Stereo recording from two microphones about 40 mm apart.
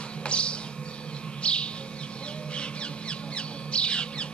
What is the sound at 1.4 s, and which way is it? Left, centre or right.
Bird, left.